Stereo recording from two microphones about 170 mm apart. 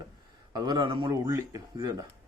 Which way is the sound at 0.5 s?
25° right (ahead or behind).